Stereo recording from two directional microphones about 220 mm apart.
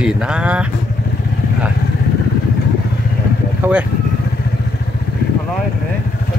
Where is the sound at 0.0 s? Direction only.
5° right (ahead or behind).